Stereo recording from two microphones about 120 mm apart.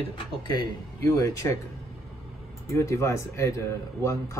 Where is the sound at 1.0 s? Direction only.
25° left (ahead or behind).